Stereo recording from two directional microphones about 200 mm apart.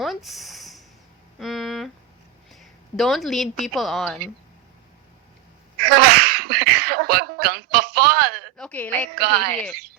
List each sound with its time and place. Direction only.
0.0 s a sound: centre (ahead or behind)
2.5 s a woman's voice: centre (ahead or behind)
5.8 s sneeze: 50° right (ahead or behind)
8.5 s a woman's voice: 5° left (ahead or behind)
9.1 s speech: 55° right (ahead or behind)